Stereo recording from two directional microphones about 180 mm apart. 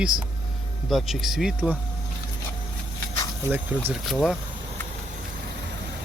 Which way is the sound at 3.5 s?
10° right (ahead or behind).